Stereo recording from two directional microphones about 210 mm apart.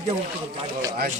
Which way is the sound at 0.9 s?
45° right (ahead or behind).